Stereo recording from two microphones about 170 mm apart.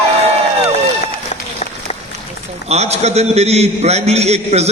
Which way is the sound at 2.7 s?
40° right (ahead or behind).